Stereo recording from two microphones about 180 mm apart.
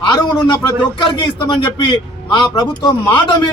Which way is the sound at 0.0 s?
25° left (ahead or behind).